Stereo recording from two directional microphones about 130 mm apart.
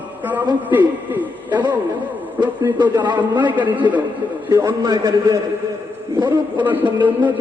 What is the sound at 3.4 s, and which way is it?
Speech, 15° right (ahead or behind).